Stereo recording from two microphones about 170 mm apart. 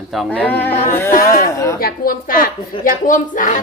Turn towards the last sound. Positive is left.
turn(degrees=50)  # may be behind; listen again after turning